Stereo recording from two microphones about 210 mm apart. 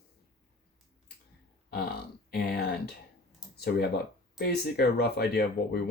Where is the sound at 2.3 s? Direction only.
50° left (ahead or behind).